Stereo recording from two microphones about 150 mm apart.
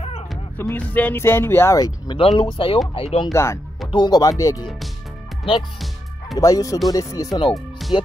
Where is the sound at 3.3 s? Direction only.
20° left (ahead or behind).